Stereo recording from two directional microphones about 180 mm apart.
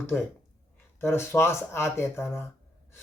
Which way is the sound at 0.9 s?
15° left (ahead or behind).